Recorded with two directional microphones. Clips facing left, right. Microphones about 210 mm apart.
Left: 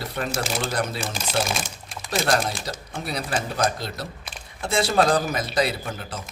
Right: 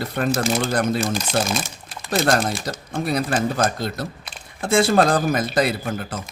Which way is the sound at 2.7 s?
50° right (ahead or behind).